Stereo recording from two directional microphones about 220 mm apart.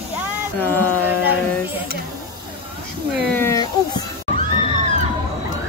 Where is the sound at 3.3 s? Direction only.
15° left (ahead or behind).